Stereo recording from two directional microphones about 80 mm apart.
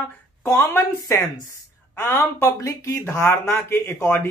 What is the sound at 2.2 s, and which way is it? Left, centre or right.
Speech, left.